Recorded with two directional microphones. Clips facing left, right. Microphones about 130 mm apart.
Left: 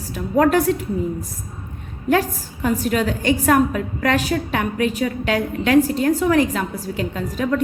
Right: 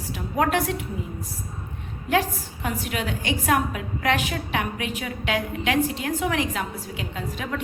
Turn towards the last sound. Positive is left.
turn(degrees=40)  # may be behind; listen again after turning